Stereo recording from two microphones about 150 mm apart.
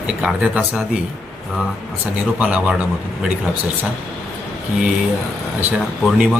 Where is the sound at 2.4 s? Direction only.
10° right (ahead or behind).